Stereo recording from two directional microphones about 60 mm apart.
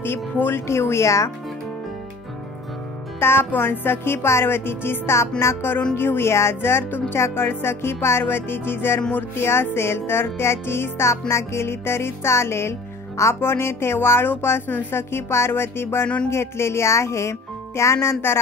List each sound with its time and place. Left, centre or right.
0.0 s music: left
3.2 s speech: left
5.4 s music: left
5.9 s speech: left
9.4 s music: left